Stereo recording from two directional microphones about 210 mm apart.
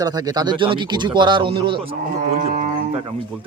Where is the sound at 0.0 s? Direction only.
20° right (ahead or behind).